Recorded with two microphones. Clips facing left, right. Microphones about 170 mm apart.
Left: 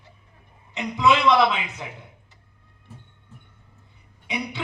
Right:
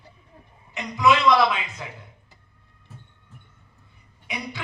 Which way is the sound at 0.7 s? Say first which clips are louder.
Even; 20° left (ahead or behind).